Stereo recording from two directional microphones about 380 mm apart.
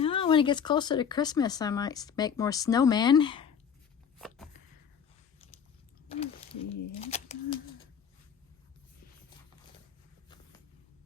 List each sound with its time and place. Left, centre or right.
0.0 s speech: centre
6.1 s a sound: centre
7.0 s speech: centre